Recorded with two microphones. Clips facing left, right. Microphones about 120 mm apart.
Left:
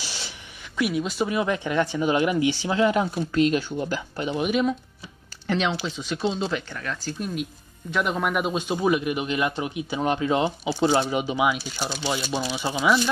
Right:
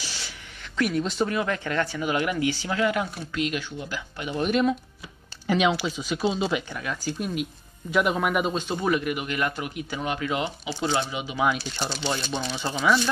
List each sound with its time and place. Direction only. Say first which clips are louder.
0.7 s speech: even; 5° left (ahead or behind)
1.3 s speech: left 3 dB; 15° left (ahead or behind)
3.3 s speech: left 7 dB; 35° left (ahead or behind)
4.3 s speech: even; 5° left (ahead or behind)
8.5 s speech: left 2 dB; 15° left (ahead or behind); by 11.1 s 30° left (ahead or behind)
11.1 s speech: left 7 dB; 45° left (ahead or behind)
11.3 s speech: left 1 dB; 5° left (ahead or behind)